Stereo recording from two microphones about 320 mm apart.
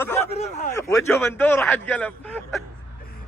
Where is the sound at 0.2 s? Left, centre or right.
Left.